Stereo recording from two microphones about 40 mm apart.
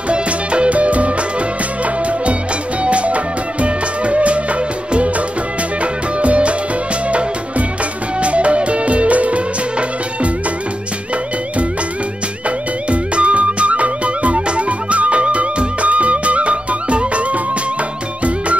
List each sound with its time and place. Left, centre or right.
0.1 s music: right
2.8 s music: right
6.2 s music: right
13.1 s music: right